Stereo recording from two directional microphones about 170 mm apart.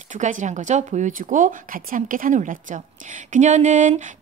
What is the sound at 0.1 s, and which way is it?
Speech, 45° right (ahead or behind).